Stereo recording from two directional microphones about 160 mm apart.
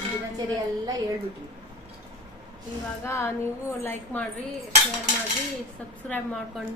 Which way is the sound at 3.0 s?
15° left (ahead or behind).